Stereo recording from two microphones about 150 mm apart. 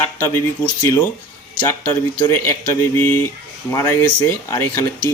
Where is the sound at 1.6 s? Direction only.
20° left (ahead or behind).